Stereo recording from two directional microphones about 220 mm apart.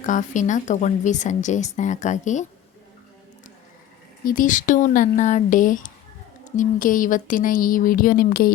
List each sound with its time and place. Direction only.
0.0 s speech: 35° left (ahead or behind)
4.2 s speech: 40° left (ahead or behind)